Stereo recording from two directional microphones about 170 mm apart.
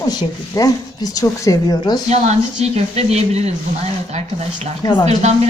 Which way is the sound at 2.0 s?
40° right (ahead or behind).